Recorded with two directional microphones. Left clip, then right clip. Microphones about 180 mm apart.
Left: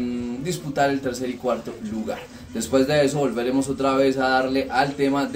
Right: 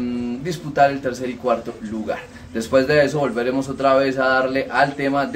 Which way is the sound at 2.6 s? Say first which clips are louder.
Right 4 dB; 15° right (ahead or behind).